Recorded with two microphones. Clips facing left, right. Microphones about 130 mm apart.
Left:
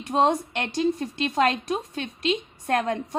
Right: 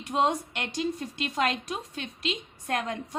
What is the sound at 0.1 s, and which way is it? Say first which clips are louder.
A woman's voice: left 4 dB; 40° left (ahead or behind).